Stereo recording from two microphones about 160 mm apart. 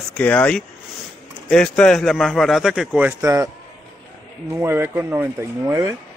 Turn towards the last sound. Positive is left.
turn(degrees=-15)  # may be behind; listen again after turning